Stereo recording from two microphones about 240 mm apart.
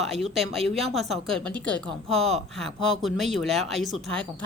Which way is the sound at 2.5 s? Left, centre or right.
Centre.